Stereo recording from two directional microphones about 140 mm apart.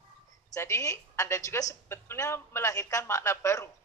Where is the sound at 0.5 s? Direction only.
20° left (ahead or behind).